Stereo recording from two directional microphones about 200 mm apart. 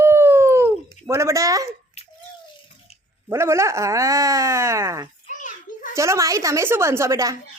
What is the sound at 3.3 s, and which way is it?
Speech, 15° right (ahead or behind).